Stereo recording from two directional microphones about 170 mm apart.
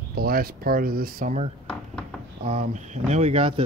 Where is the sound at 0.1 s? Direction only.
65° right (ahead or behind).